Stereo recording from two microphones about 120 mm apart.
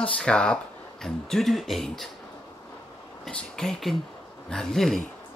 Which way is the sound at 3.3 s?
5° left (ahead or behind).